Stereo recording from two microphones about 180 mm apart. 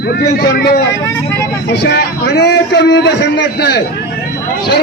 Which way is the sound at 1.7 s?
65° left (ahead or behind).